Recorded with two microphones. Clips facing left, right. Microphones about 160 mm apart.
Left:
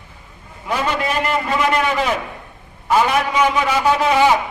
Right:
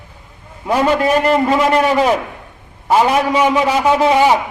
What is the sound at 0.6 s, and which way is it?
A man's voice, 35° right (ahead or behind).